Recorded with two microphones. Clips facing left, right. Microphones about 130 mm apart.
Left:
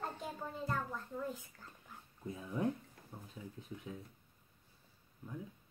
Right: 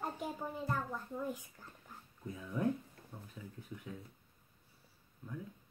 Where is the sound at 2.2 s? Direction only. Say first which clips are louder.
Even; 25° left (ahead or behind).